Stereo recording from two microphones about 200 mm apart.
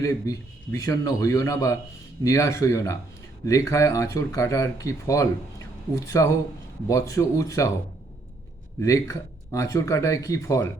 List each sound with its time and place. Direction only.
0.0 s speech: 15° left (ahead or behind)
8.8 s speech: 15° left (ahead or behind)